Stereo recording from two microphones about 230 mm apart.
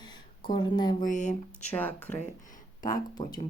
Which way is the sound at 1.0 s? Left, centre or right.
Left.